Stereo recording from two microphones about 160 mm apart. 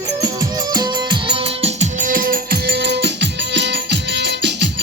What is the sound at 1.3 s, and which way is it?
Music, 40° right (ahead or behind).